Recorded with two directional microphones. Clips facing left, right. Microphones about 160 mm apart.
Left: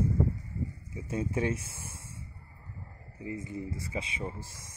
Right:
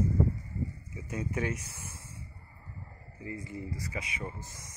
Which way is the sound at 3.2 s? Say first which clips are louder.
Left 3 dB; 20° left (ahead or behind).